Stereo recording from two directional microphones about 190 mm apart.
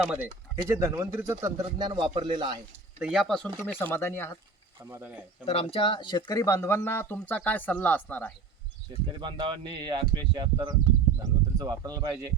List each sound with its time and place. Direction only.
0.0 s speech: 5° right (ahead or behind)
0.5 s speech: 15° right (ahead or behind)
3.0 s speech: centre (ahead or behind)
4.8 s speech: 10° right (ahead or behind)
5.5 s speech: 30° left (ahead or behind); by 8.3 s 10° left (ahead or behind)
8.9 s speech: 20° right (ahead or behind)